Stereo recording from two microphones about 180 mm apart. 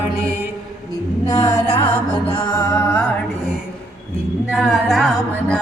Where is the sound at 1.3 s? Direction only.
20° left (ahead or behind).